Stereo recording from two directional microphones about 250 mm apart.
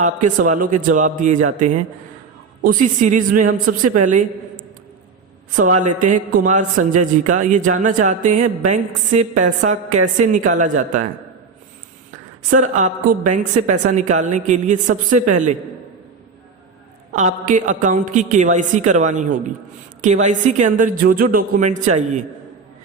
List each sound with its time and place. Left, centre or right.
0.0 s a woman's voice: right
5.8 s a woman's voice: right
12.5 s a woman's voice: right
17.2 s a woman's voice: right